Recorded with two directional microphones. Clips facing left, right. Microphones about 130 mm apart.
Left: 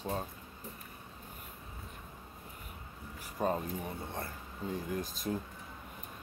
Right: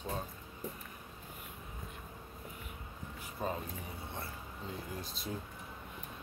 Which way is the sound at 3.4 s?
45° left (ahead or behind).